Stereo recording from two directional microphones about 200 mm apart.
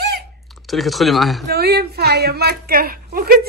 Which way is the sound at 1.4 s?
50° right (ahead or behind).